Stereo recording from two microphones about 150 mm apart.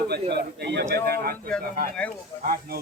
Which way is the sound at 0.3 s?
90° right.